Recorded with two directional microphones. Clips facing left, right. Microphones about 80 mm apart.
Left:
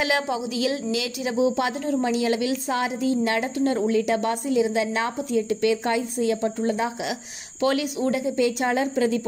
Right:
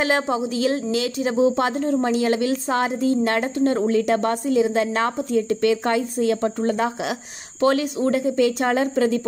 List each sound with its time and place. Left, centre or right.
0.0 s a woman's voice: right
7.6 s a woman's voice: right